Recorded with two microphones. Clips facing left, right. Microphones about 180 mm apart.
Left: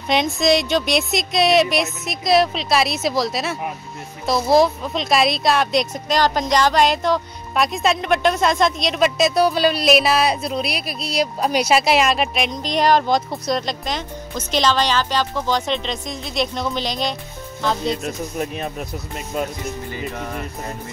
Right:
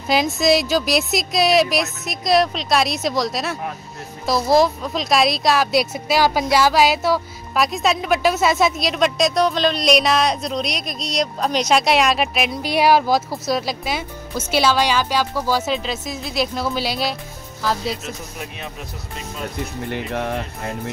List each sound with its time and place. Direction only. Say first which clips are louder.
0.1 s a woman's voice: even; centre (ahead or behind)
19.9 s speech: right 4 dB; 65° right (ahead or behind)